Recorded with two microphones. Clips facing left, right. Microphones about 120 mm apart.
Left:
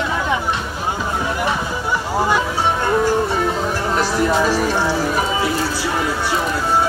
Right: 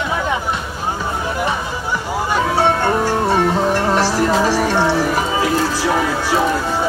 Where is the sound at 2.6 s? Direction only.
70° right (ahead or behind).